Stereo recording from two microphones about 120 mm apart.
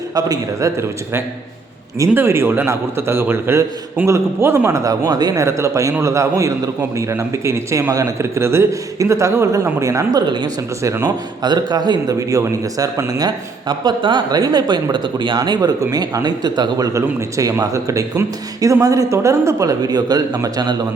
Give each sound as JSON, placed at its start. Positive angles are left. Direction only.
{"t": 0.1, "sound": "a man's voice", "side_deg": -30}